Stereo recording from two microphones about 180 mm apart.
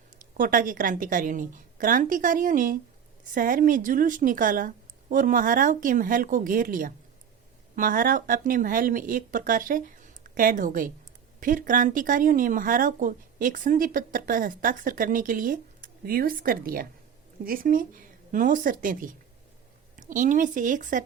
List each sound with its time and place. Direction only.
0.3 s speech: 50° right (ahead or behind)